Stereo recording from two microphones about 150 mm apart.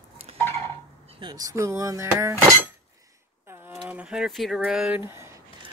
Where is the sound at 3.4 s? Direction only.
15° right (ahead or behind).